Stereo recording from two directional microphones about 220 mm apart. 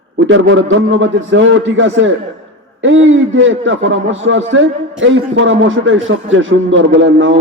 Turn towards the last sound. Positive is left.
turn(degrees=-60)  # may be behind; listen again after turning